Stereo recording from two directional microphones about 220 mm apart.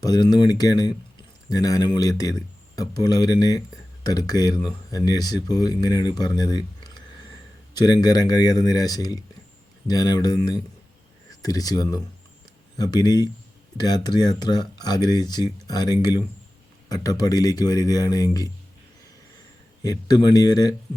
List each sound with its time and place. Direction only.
0.0 s speech: 20° left (ahead or behind)
19.8 s speech: 15° left (ahead or behind)